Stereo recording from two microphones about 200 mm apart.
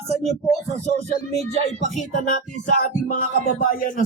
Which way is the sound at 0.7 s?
35° right (ahead or behind).